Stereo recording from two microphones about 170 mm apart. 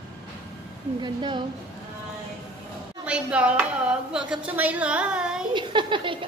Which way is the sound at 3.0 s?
5° right (ahead or behind).